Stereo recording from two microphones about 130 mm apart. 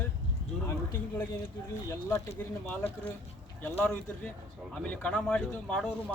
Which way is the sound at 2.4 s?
15° left (ahead or behind).